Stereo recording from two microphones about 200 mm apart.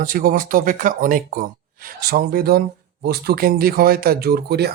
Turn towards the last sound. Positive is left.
turn(degrees=-55)  # may be behind; listen again after turning